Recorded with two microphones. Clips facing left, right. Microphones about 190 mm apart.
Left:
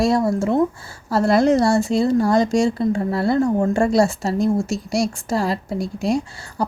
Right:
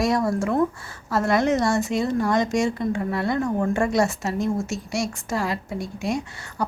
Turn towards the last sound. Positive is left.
turn(degrees=35)  # may be behind; listen again after turning